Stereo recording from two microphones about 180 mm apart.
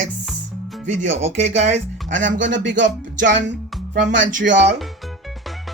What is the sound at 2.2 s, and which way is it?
Speech, 90° right.